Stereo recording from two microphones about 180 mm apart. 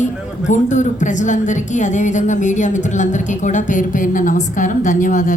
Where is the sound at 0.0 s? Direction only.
45° left (ahead or behind).